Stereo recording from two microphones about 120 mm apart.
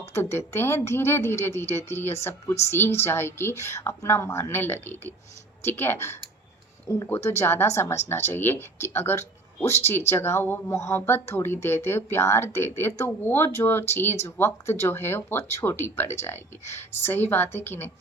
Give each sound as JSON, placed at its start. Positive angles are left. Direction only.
{"t": 0.0, "sound": "speech", "side_deg": 20}